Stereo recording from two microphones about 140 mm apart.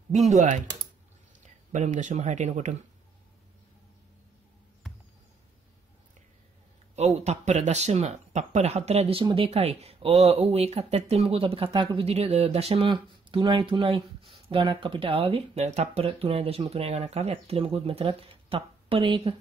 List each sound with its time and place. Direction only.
0.4 s speech: 65° right (ahead or behind)
7.0 s speech: 50° right (ahead or behind)